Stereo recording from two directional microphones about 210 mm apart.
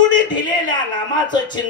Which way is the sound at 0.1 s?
20° left (ahead or behind).